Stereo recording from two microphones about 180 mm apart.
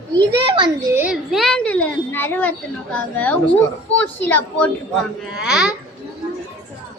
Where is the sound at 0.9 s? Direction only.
5° right (ahead or behind); by 4.7 s 10° left (ahead or behind).